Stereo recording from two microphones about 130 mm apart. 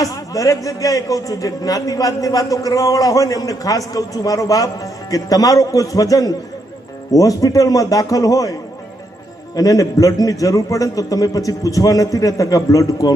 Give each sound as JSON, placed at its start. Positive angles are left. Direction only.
{"t": 0.0, "sound": "a man's voice", "side_deg": 25}
{"t": 9.6, "sound": "a man's voice", "side_deg": 25}